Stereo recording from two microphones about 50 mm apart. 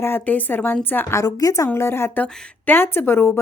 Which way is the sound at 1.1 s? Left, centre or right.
Left.